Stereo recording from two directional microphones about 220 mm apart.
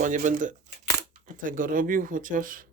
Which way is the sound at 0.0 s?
35° right (ahead or behind).